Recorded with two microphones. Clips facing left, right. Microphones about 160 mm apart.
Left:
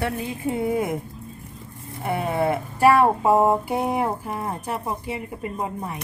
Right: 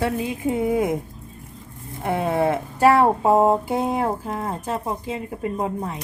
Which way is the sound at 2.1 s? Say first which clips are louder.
Right 2 dB; 15° right (ahead or behind).